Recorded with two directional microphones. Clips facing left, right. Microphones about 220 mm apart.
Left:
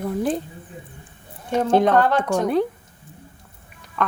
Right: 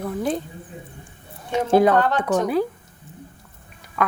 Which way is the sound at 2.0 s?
10° left (ahead or behind).